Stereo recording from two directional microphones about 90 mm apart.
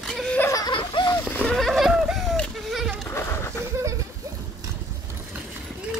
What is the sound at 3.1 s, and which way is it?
Goat, 30° left (ahead or behind).